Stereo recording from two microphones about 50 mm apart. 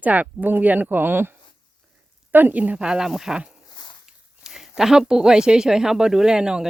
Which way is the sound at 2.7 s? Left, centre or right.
Centre.